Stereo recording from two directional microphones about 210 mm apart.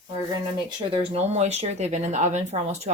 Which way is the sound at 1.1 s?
30° right (ahead or behind).